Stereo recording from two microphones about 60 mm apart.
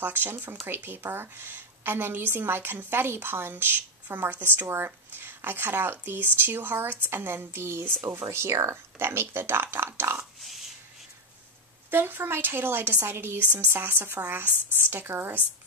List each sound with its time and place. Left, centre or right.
0.0 s a woman's voice: right
10.4 s a sound: centre
11.9 s a woman's voice: right